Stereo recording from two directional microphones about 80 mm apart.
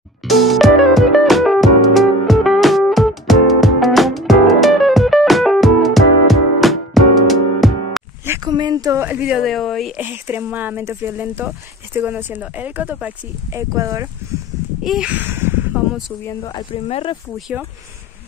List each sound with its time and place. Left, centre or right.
0.3 s music: centre
8.5 s a sound: right
9.0 s speech: centre
9.4 s speech: centre
9.9 s speech: right
13.5 s speech: right
14.8 s speech: centre
15.0 s speech: right
16.4 s speech: left